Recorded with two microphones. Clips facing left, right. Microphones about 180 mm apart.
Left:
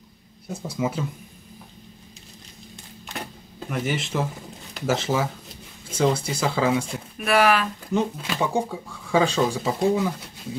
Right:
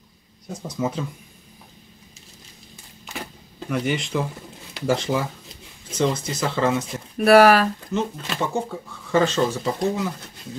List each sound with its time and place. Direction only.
0.5 s speech: 10° left (ahead or behind)
3.1 s a sound: centre (ahead or behind)
4.7 s speech: 5° left (ahead or behind)
7.2 s speech: 40° right (ahead or behind)
7.9 s speech: 10° left (ahead or behind)